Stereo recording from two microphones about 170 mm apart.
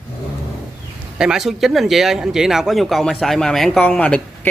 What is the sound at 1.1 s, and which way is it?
Speech, 5° right (ahead or behind).